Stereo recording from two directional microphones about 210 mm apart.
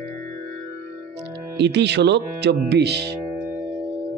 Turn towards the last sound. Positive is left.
turn(degrees=-50)  # may be behind; listen again after turning